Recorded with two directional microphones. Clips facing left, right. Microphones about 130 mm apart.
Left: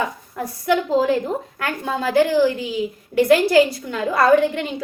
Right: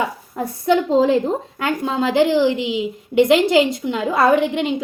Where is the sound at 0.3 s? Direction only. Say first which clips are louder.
Right 3 dB; 25° right (ahead or behind).